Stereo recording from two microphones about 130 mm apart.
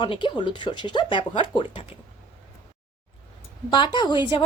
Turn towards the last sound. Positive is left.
turn(degrees=35)  # may be behind; listen again after turning